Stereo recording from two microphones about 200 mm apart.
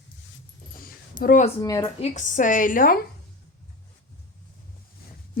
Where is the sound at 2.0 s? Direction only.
35° left (ahead or behind).